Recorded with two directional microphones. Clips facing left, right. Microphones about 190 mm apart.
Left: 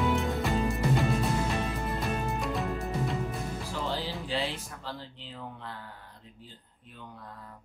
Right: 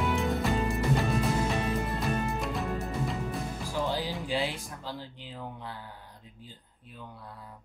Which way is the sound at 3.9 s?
15° right (ahead or behind).